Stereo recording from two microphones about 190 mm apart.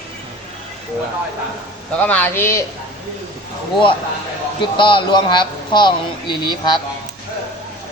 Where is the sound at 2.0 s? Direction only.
10° left (ahead or behind).